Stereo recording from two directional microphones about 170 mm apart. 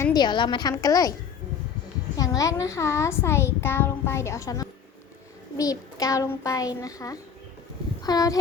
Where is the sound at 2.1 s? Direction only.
20° left (ahead or behind).